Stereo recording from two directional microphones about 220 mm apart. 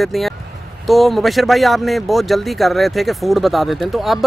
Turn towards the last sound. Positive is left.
turn(degrees=0)  # may be behind; listen again after turning